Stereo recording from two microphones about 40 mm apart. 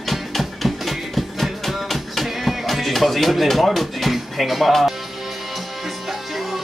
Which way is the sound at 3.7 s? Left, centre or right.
Centre.